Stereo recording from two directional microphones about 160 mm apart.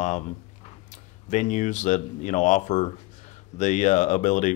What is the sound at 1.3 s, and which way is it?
Speech, 50° left (ahead or behind).